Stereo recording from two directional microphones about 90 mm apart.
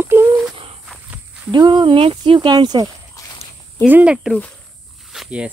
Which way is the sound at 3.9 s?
15° right (ahead or behind).